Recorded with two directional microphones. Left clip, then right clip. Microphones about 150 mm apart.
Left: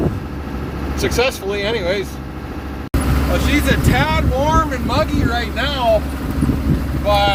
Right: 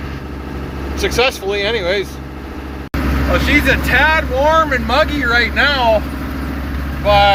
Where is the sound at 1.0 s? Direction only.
10° left (ahead or behind).